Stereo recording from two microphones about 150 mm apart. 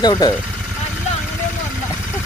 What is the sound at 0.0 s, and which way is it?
Speech, 25° left (ahead or behind).